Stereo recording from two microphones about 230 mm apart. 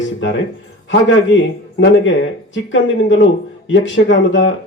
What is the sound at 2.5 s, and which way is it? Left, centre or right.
A man's voice, left.